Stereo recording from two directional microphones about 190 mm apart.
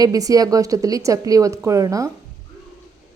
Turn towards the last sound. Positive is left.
turn(degrees=-15)  # may be behind; listen again after turning